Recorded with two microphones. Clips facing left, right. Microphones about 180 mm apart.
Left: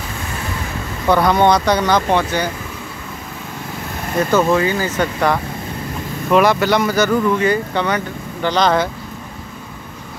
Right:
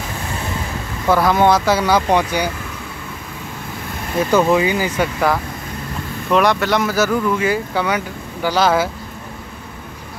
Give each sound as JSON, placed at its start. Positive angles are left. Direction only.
{"t": 1.0, "sound": "speech", "side_deg": -5}
{"t": 4.2, "sound": "speech", "side_deg": -10}